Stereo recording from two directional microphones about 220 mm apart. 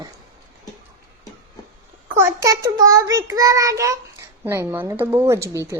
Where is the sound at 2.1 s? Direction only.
10° right (ahead or behind).